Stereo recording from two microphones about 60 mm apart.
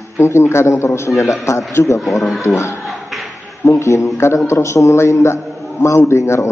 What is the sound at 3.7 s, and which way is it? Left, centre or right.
A man's voice, left.